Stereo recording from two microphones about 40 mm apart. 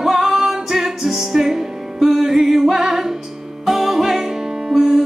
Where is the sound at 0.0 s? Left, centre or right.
Centre.